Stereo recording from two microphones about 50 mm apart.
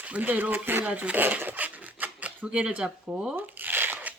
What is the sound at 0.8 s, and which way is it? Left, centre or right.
Speech, right.